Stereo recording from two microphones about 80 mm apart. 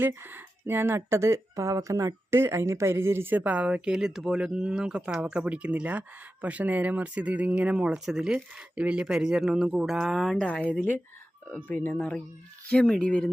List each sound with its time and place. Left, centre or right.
0.0 s speech: right; by 10.3 s centre
10.3 s speech: centre